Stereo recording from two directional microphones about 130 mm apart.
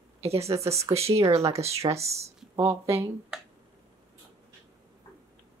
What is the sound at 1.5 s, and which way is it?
Speech, 55° right (ahead or behind).